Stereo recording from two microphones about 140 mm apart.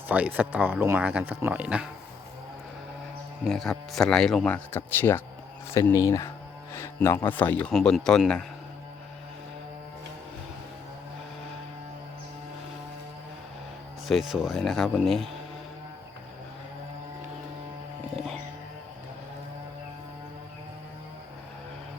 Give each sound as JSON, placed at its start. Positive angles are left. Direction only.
{"t": 0.1, "sound": "speech", "side_deg": -10}
{"t": 3.4, "sound": "speech", "side_deg": 0}
{"t": 4.5, "sound": "speech", "side_deg": 15}
{"t": 7.7, "sound": "speech", "side_deg": 0}
{"t": 14.1, "sound": "speech", "side_deg": 0}